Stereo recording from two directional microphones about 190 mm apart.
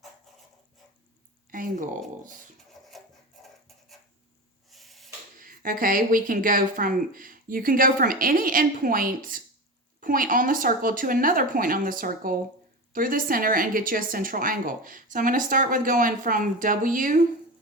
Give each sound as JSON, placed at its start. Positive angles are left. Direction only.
{"t": 1.5, "sound": "speech", "side_deg": -45}
{"t": 2.9, "sound": "wood", "side_deg": 0}
{"t": 4.7, "sound": "drawer open or close", "side_deg": 0}
{"t": 5.4, "sound": "speech", "side_deg": -45}